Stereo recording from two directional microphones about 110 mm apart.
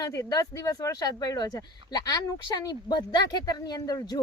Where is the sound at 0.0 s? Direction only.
30° left (ahead or behind).